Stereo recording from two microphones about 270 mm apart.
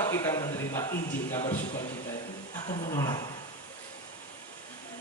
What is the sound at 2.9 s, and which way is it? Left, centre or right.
Speech, centre.